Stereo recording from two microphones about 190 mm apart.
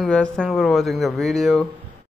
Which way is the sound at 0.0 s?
5° left (ahead or behind).